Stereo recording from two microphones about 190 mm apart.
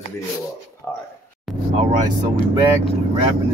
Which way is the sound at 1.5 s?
Centre (ahead or behind).